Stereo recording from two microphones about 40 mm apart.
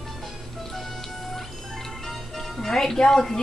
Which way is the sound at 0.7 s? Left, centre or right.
Centre.